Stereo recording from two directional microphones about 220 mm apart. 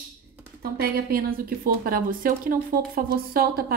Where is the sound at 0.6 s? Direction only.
45° right (ahead or behind).